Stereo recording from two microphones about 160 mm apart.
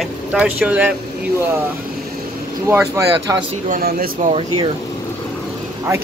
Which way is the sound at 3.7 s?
65° right (ahead or behind).